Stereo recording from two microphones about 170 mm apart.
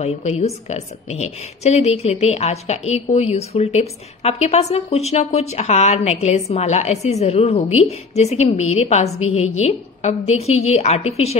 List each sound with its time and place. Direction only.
0.0 s a woman's voice: 40° left (ahead or behind)